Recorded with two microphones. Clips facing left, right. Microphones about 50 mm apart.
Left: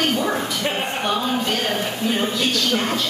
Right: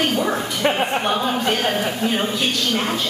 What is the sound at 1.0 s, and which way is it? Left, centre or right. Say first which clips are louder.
A woman's voice: right 2 dB; centre.